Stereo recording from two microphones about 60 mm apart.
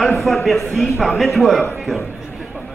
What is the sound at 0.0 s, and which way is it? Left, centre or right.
A man's voice, centre.